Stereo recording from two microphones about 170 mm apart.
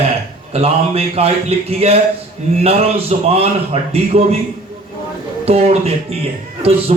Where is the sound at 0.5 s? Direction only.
35° right (ahead or behind).